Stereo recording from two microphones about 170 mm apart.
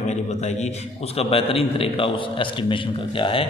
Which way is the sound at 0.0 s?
40° left (ahead or behind).